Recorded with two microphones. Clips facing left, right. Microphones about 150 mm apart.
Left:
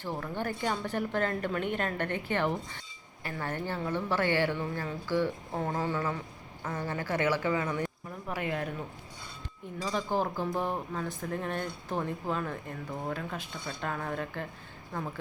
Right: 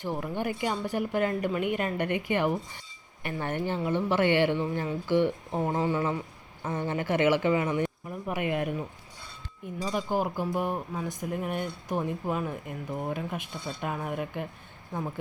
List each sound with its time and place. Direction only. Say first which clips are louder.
0.0 s speech: right 3 dB; 15° right (ahead or behind)
9.8 s speech: right 2 dB; 10° right (ahead or behind)